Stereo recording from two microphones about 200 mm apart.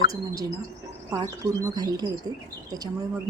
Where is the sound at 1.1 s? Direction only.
15° right (ahead or behind).